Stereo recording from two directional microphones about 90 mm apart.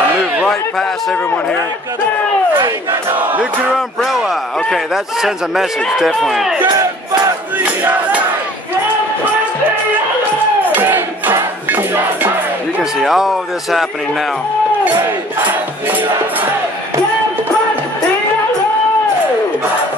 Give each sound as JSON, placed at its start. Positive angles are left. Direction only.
{"t": 3.7, "sound": "a man's voice", "side_deg": 0}
{"t": 7.5, "sound": "battle cry", "side_deg": -15}
{"t": 10.6, "sound": "crowd", "side_deg": -20}
{"t": 13.0, "sound": "a man's voice", "side_deg": -5}